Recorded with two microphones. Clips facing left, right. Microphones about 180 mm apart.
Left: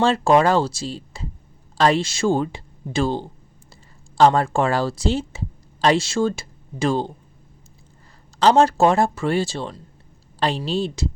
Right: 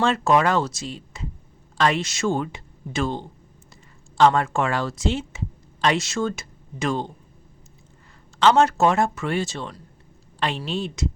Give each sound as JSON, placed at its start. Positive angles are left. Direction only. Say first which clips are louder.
{"t": 0.0, "sound": "a man's voice", "louder": "left 3 dB", "side_deg": 30}
{"t": 8.4, "sound": "a man's voice", "louder": "left 2 dB", "side_deg": 35}